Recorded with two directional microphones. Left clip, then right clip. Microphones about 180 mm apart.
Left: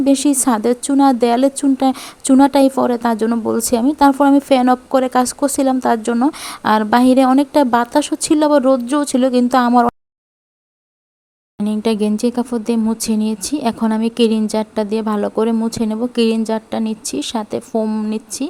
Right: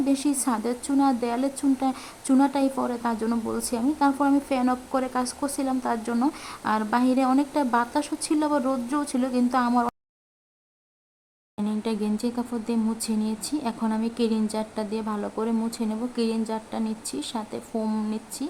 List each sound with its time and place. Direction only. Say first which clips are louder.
0.0 s speech: left 10 dB; 40° left (ahead or behind)
11.6 s speech: left 11 dB; 40° left (ahead or behind)